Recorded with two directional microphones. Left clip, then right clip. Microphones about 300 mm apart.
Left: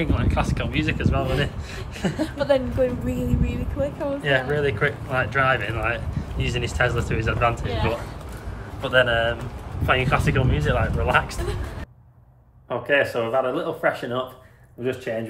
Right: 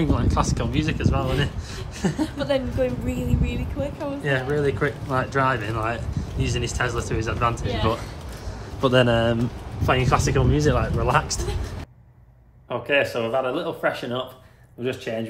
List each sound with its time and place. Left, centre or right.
0.0 s speech: centre
8.8 s speech: centre
12.6 s speech: centre